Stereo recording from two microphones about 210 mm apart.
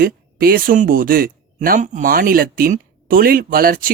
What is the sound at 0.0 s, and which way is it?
Speech, 45° right (ahead or behind).